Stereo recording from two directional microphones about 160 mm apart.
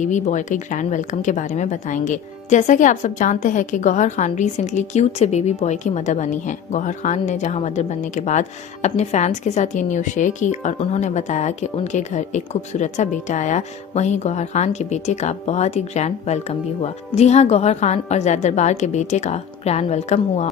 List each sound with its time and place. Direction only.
0.0 s a woman's voice: 50° left (ahead or behind)